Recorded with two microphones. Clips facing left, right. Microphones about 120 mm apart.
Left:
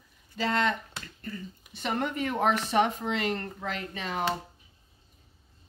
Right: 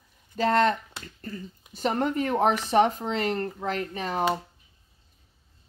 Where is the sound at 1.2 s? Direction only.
35° right (ahead or behind).